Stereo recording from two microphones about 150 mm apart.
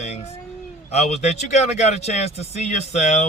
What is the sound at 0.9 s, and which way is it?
Speech, 50° left (ahead or behind).